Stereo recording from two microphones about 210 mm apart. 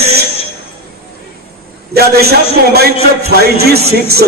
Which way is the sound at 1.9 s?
50° right (ahead or behind).